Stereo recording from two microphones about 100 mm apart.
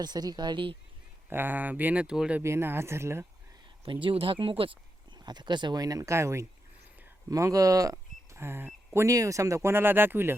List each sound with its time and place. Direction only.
0.0 s speech: 45° right (ahead or behind)
1.3 s speech: 20° right (ahead or behind)
2.4 s speech: 25° right (ahead or behind)
4.0 s speech: 65° right (ahead or behind)
5.1 s speech: 45° right (ahead or behind); by 10.3 s 20° right (ahead or behind)